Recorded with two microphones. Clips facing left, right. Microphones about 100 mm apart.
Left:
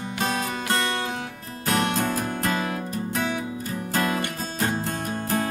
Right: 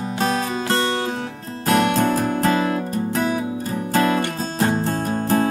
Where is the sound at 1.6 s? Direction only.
35° right (ahead or behind).